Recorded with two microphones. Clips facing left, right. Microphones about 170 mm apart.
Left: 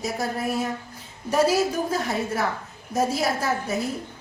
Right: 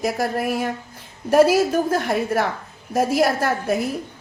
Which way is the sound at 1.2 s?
60° right (ahead or behind).